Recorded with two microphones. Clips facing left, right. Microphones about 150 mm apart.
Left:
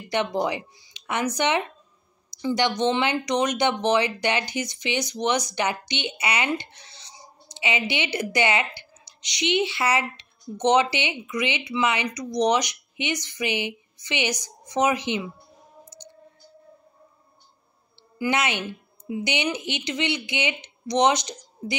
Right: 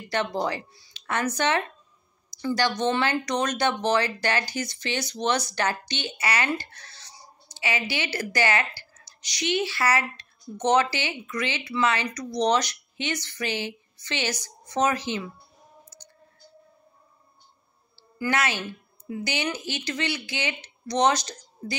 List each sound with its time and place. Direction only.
0.1 s speech: 15° left (ahead or behind)
15.9 s clicking: 20° left (ahead or behind)
18.2 s speech: 20° left (ahead or behind)